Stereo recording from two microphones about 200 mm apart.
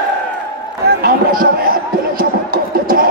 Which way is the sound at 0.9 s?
50° right (ahead or behind).